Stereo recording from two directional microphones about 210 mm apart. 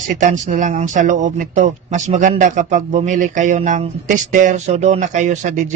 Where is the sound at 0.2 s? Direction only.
35° right (ahead or behind).